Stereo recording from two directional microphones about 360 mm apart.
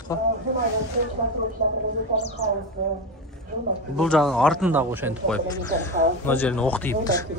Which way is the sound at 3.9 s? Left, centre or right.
Centre.